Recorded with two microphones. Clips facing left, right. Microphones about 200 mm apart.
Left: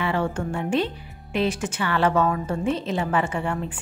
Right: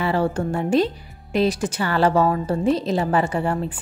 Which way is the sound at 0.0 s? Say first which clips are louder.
Right 4 dB; 35° right (ahead or behind).